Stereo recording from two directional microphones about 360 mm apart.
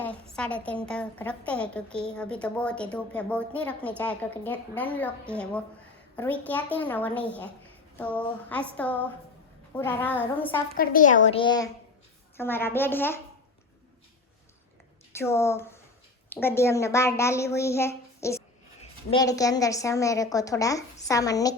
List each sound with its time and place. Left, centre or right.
0.0 s a woman's voice: centre
10.8 s a woman's voice: left; by 13.1 s centre
15.2 s a woman's voice: centre